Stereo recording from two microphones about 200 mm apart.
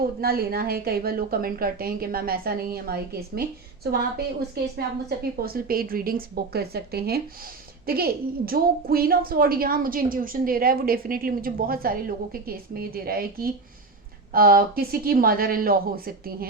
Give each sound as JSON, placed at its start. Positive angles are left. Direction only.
{"t": 0.2, "sound": "a woman's voice", "side_deg": -50}
{"t": 4.5, "sound": "a woman's voice", "side_deg": -50}